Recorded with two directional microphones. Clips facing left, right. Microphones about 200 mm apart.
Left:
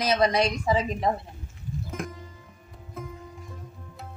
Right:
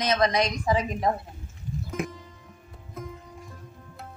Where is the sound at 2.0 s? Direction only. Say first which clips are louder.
Right 3 dB; 5° right (ahead or behind).